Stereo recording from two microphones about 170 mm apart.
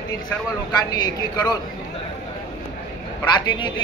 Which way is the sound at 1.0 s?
25° left (ahead or behind).